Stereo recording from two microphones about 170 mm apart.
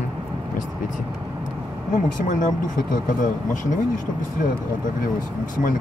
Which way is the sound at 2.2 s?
50° left (ahead or behind).